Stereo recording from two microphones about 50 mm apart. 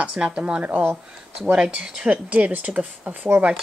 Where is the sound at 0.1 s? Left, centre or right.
Right.